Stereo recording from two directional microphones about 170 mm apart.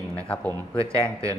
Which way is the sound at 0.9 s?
20° right (ahead or behind).